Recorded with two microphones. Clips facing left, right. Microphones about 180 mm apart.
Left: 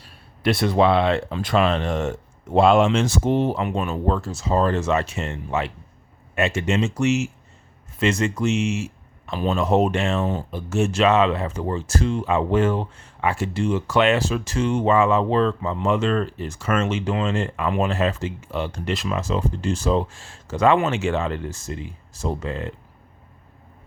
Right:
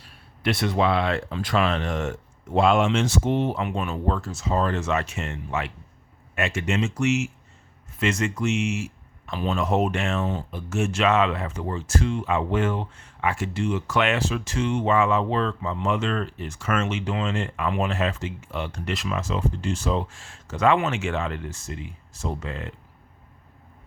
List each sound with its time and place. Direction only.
0.0 s speech: 35° left (ahead or behind)